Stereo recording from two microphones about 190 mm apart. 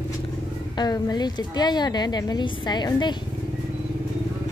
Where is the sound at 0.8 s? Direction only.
20° left (ahead or behind).